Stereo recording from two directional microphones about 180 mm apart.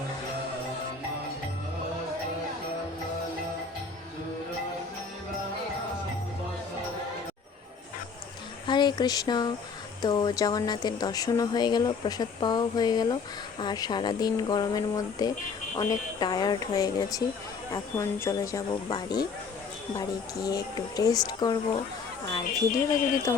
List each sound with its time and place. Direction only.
8.6 s a sound: 25° left (ahead or behind)
10.0 s speech: 20° left (ahead or behind)
22.7 s speech: 50° left (ahead or behind)